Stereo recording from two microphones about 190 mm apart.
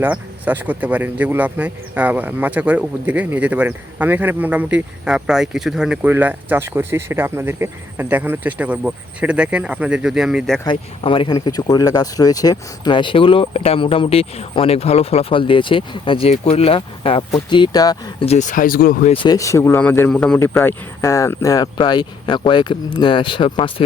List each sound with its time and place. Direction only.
0.0 s a man's voice: 10° right (ahead or behind)
10.6 s speech: 25° left (ahead or behind)
18.3 s speech: 40° left (ahead or behind)
19.1 s speech: 25° left (ahead or behind)